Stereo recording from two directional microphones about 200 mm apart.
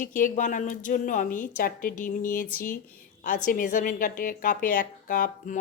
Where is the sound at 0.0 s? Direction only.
40° left (ahead or behind).